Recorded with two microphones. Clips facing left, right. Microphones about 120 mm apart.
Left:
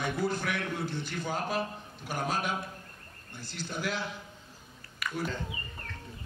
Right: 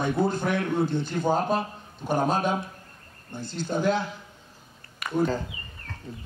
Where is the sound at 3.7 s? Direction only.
45° right (ahead or behind).